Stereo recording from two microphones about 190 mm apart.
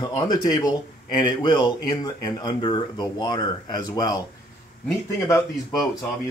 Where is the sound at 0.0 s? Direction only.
20° left (ahead or behind).